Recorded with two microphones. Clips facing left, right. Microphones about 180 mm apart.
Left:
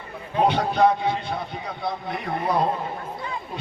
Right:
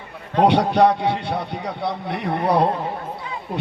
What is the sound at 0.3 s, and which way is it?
A man's voice, 75° right (ahead or behind).